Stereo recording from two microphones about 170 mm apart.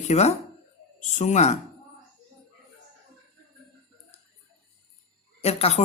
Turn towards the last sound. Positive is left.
turn(degrees=35)  # may be behind; listen again after turning